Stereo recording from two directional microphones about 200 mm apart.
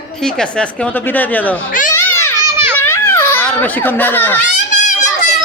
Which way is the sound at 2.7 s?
10° left (ahead or behind).